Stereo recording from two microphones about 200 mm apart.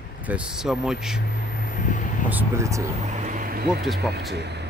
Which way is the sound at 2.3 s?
10° right (ahead or behind).